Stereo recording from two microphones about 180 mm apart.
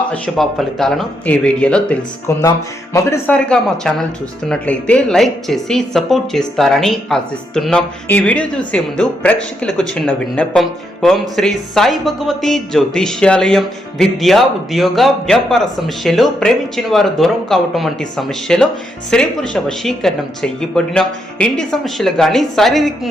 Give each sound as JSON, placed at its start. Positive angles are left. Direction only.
{"t": 0.1, "sound": "a woman's voice", "side_deg": 5}